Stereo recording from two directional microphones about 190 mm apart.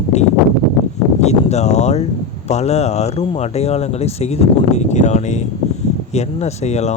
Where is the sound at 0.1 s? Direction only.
35° left (ahead or behind).